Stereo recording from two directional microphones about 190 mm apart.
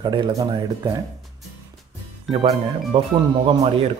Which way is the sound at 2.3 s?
30° right (ahead or behind).